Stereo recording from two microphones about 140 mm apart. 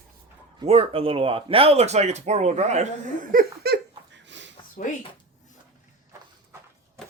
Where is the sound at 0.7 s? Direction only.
40° right (ahead or behind).